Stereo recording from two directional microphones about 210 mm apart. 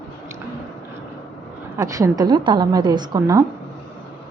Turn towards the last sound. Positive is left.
turn(degrees=-15)  # may be behind; listen again after turning